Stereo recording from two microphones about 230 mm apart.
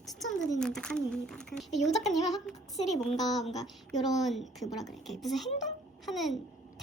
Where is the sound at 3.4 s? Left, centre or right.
Centre.